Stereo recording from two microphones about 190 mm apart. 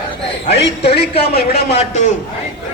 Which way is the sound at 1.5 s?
35° left (ahead or behind).